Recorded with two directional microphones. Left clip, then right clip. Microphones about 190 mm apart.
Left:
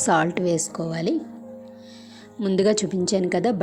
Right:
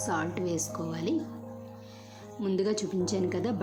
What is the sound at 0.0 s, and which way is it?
A woman's voice, 40° left (ahead or behind).